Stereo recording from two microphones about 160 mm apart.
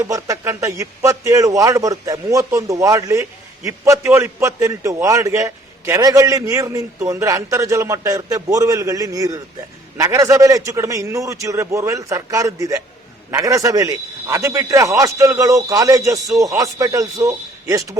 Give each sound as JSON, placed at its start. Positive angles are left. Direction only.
{"t": 0.0, "sound": "a man's voice", "side_deg": -20}